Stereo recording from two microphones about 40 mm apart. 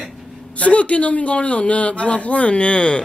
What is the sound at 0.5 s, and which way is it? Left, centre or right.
Speech, left.